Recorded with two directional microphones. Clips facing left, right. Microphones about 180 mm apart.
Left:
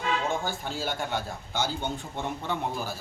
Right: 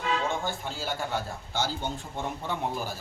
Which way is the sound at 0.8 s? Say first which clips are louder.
Left 3 dB; 25° left (ahead or behind).